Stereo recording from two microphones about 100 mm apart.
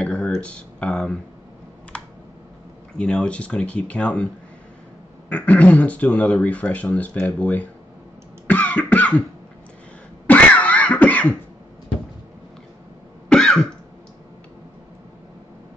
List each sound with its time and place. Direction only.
0.0 s a sound: 10° left (ahead or behind)
3.0 s speech: 10° left (ahead or behind)
5.3 s speech: 15° left (ahead or behind)
8.5 s cough: 15° left (ahead or behind)
10.2 s cough: 15° left (ahead or behind)
13.3 s cough: 5° left (ahead or behind)